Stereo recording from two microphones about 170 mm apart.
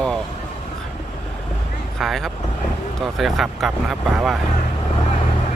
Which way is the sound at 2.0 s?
Centre (ahead or behind).